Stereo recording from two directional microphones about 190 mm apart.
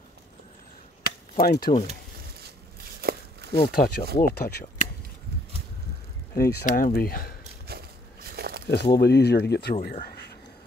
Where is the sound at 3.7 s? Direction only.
50° left (ahead or behind).